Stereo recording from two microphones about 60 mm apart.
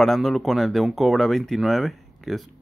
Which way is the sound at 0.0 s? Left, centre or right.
Centre.